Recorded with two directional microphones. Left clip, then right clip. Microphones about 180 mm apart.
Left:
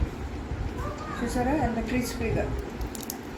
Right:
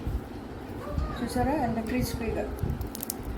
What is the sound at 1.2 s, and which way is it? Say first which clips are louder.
Speech: left 1 dB; 15° left (ahead or behind).